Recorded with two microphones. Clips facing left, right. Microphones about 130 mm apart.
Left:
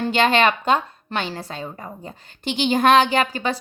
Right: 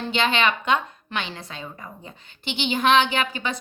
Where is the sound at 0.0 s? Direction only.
45° left (ahead or behind).